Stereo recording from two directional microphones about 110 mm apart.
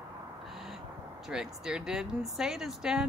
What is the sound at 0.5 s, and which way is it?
Owl, centre (ahead or behind).